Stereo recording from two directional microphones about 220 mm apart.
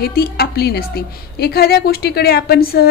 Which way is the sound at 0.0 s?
45° left (ahead or behind).